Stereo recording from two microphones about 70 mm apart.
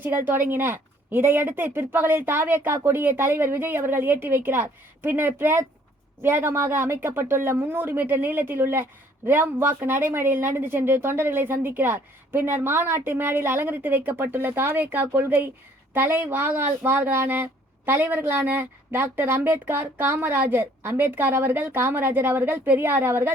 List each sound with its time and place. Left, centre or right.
0.0 s a woman's voice: right